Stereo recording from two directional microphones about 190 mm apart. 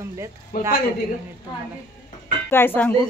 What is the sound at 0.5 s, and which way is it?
Speech, 50° left (ahead or behind).